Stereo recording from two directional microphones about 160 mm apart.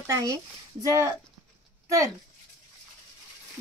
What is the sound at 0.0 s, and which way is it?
Speech, 20° right (ahead or behind).